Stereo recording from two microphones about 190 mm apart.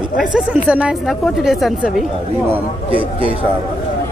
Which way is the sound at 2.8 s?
30° right (ahead or behind).